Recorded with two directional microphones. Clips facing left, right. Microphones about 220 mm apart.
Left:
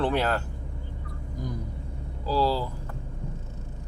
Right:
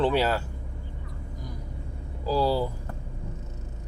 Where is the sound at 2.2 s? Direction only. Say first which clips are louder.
Right 1 dB; 15° right (ahead or behind).